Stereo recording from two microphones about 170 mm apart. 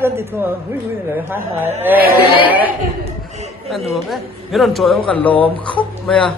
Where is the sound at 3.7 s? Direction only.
Centre (ahead or behind).